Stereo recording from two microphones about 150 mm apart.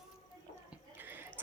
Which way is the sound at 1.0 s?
15° right (ahead or behind).